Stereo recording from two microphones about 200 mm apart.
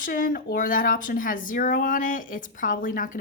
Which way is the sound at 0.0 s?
45° left (ahead or behind).